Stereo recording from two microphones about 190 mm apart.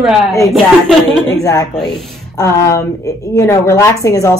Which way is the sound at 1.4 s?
15° left (ahead or behind).